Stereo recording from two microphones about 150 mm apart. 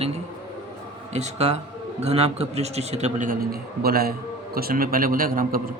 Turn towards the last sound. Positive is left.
turn(degrees=-70)  # may be behind; listen again after turning